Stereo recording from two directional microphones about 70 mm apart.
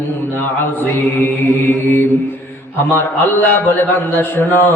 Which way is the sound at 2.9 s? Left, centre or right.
Left.